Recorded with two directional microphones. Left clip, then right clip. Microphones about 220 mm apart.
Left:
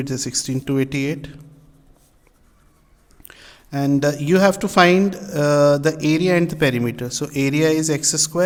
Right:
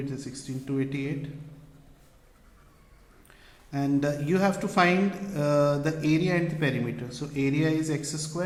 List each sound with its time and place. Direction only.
0.0 s speech: 55° left (ahead or behind)
3.2 s speech: 50° left (ahead or behind)